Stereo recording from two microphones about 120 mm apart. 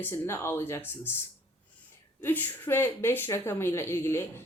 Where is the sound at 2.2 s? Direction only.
15° left (ahead or behind).